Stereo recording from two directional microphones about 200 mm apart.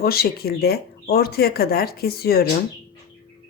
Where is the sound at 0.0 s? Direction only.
50° left (ahead or behind).